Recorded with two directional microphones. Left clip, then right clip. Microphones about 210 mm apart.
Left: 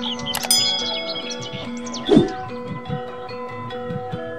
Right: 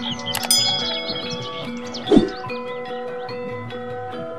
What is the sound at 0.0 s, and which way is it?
Music, centre (ahead or behind).